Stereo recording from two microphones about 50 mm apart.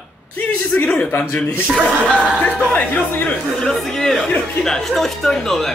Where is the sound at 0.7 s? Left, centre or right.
Centre.